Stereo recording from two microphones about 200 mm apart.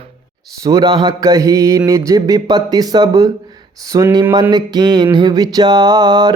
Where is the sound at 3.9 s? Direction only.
15° right (ahead or behind).